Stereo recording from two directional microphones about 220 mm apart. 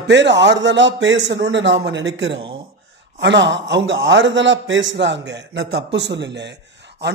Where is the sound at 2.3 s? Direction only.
25° right (ahead or behind).